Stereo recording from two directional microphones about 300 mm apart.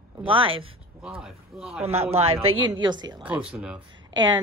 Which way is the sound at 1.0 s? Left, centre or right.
Centre.